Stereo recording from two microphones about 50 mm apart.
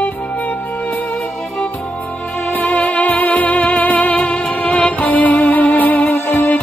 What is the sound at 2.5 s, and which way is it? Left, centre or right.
Music, left.